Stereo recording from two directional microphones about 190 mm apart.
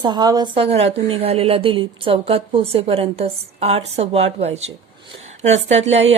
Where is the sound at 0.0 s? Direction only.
20° right (ahead or behind).